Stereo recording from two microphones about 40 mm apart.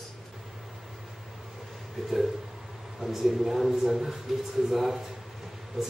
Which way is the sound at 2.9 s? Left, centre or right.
Centre.